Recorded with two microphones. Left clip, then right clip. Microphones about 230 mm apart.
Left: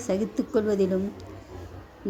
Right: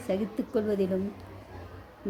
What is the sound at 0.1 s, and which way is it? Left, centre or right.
Speech, centre.